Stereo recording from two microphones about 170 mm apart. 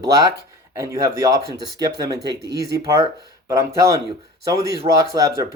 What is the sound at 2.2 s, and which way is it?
Speech, 80° right.